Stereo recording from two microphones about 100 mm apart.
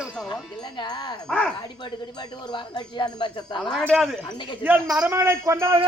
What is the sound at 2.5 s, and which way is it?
Speech, 50° left (ahead or behind).